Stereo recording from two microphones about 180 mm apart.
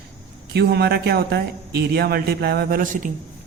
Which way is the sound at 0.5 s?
65° right (ahead or behind).